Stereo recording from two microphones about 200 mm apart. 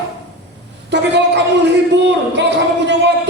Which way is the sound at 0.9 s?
60° right (ahead or behind).